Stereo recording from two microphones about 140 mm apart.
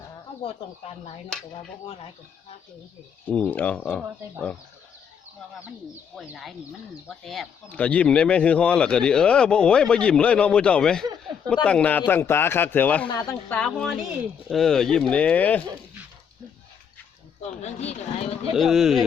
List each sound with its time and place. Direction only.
3.2 s speech: 10° left (ahead or behind)
6.1 s speech: centre (ahead or behind)
13.1 s speech: 25° left (ahead or behind)
13.5 s speech: 5° left (ahead or behind)
17.6 s speech: 50° left (ahead or behind)
18.5 s speech: centre (ahead or behind)